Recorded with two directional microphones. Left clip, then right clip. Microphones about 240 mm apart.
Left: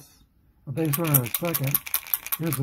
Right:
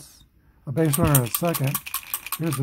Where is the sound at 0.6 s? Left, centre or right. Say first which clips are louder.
Right 5 dB; centre.